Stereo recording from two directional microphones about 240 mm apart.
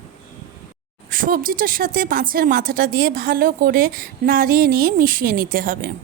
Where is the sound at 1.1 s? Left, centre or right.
Right.